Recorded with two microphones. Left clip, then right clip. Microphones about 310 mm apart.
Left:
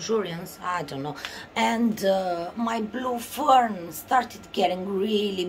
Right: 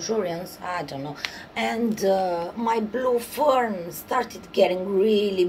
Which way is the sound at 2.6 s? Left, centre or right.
Left.